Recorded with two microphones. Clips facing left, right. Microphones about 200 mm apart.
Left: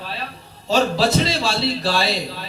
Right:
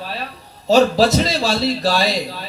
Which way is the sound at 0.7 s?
40° right (ahead or behind).